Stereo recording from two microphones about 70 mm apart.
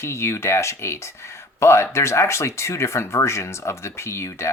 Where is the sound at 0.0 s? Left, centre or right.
Left.